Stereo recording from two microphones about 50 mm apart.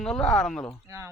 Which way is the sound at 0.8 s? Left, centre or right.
Right.